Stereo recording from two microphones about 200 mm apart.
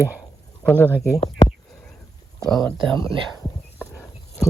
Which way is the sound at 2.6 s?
Centre (ahead or behind).